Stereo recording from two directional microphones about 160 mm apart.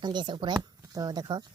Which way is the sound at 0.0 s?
30° right (ahead or behind).